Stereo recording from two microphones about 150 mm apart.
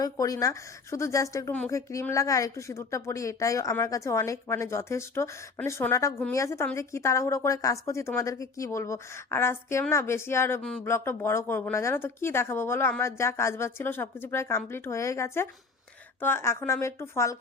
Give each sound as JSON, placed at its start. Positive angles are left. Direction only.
{"t": 0.0, "sound": "a woman's voice", "side_deg": 25}
{"t": 10.6, "sound": "speech", "side_deg": 5}
{"t": 10.8, "sound": "speech", "side_deg": 15}